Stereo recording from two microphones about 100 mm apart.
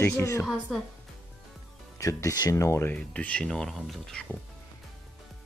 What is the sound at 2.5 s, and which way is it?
Speech, 25° left (ahead or behind).